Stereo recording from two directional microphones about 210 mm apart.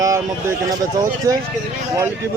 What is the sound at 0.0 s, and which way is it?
Speech, 15° right (ahead or behind).